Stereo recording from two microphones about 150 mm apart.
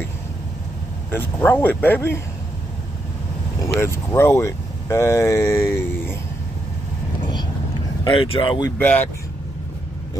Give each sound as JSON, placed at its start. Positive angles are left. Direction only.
{"t": 1.1, "sound": "speech", "side_deg": 10}
{"t": 3.6, "sound": "speech", "side_deg": 20}
{"t": 8.0, "sound": "speech", "side_deg": 35}
{"t": 8.7, "sound": "speech", "side_deg": 10}